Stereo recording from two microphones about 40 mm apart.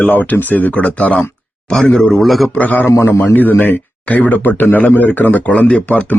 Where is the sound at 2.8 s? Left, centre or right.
Left.